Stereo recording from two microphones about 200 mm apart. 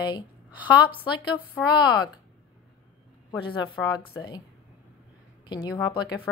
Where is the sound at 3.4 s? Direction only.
20° left (ahead or behind).